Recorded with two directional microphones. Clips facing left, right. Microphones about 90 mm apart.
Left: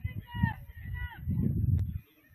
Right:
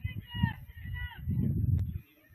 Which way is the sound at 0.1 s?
25° left (ahead or behind).